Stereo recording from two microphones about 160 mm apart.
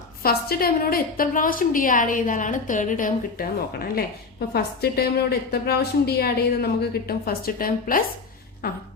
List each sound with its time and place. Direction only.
0.2 s a woman's voice: 70° left (ahead or behind)
3.9 s a woman's voice: 75° left (ahead or behind)
8.6 s a sound: 75° left (ahead or behind)